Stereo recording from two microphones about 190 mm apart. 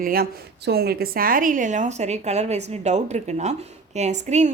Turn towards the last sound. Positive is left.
turn(degrees=-35)  # may be behind; listen again after turning